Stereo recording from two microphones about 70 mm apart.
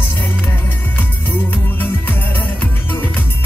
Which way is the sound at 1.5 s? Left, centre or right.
Left.